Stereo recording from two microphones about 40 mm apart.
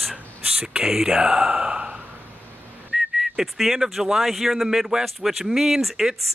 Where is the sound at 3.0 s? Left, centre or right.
Centre.